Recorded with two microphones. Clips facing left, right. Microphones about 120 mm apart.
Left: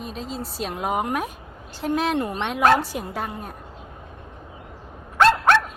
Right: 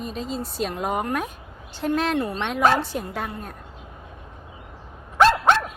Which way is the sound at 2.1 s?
15° left (ahead or behind).